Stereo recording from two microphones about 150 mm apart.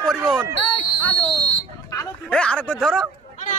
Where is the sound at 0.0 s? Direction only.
5° left (ahead or behind).